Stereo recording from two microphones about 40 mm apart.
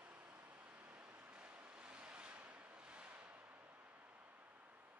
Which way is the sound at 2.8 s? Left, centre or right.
Right.